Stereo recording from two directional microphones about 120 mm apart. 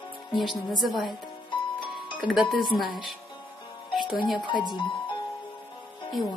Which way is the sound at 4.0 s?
40° left (ahead or behind).